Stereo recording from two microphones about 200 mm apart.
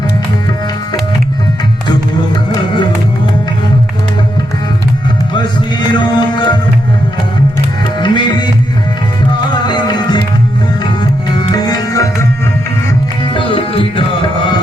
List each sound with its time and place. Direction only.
1.9 s music: 20° left (ahead or behind)
5.3 s music: 20° left (ahead or behind)
8.0 s tabla: 20° left (ahead or behind)
9.4 s music: 20° left (ahead or behind)
11.3 s tabla: 20° left (ahead or behind)
13.3 s music: 25° left (ahead or behind)